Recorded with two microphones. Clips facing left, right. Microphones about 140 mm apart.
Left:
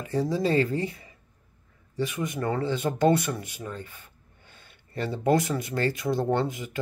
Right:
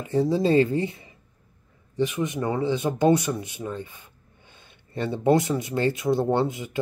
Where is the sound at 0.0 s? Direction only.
25° right (ahead or behind).